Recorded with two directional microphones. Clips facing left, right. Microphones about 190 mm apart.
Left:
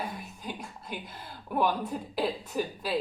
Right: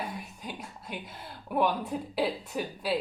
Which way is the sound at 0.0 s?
10° right (ahead or behind).